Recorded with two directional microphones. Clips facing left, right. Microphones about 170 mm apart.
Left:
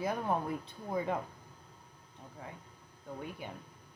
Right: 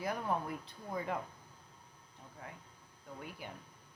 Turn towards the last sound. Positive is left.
turn(degrees=25)  # may be behind; listen again after turning